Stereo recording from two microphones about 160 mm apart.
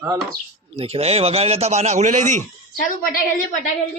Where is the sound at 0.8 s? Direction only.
40° right (ahead or behind).